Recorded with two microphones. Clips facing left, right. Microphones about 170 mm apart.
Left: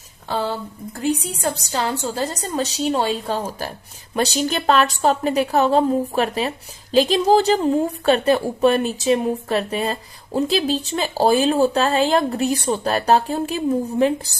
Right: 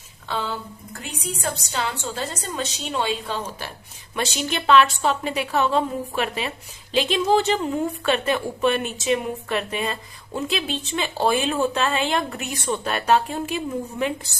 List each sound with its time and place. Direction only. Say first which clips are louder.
0.3 s a woman's voice: left 4 dB; 40° left (ahead or behind)